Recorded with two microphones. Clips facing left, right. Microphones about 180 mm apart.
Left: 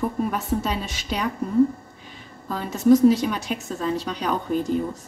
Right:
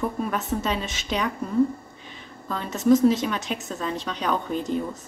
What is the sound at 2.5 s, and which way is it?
A woman's voice, 10° left (ahead or behind).